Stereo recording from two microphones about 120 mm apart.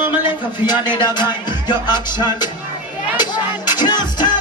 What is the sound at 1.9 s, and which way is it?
Music, 35° left (ahead or behind).